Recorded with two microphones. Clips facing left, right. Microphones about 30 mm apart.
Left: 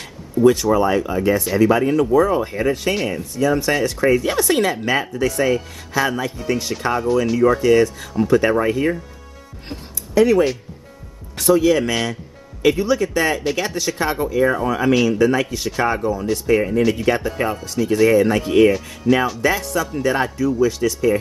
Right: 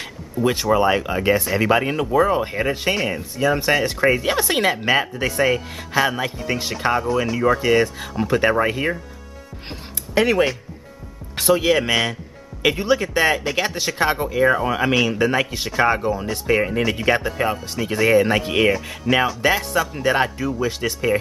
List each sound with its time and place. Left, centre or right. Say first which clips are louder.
0.4 s speech: left 4 dB; right
10.1 s speech: left 3 dB; right